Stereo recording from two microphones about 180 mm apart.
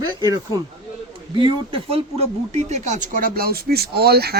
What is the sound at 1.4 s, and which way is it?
Speech, 30° right (ahead or behind).